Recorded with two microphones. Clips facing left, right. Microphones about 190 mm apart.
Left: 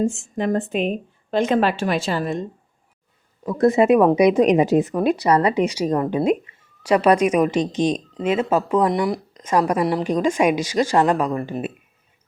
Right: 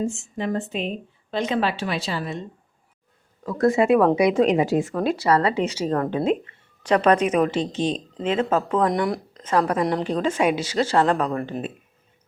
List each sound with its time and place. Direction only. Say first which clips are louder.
0.0 s a woman's voice: left 4 dB; 50° left (ahead or behind)
3.4 s speech: left 3 dB; 20° left (ahead or behind); by 9.2 s centre (ahead or behind)
9.4 s speech: left 2 dB; 15° left (ahead or behind)